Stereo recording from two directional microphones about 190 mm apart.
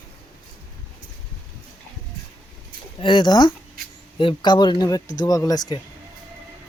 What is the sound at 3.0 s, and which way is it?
Speech, 25° left (ahead or behind).